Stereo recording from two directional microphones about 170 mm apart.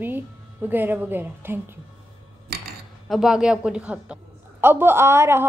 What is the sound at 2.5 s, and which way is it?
Cutlery, 70° right (ahead or behind).